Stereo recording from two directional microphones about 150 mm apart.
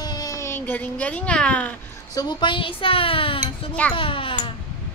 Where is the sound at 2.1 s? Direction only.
30° left (ahead or behind).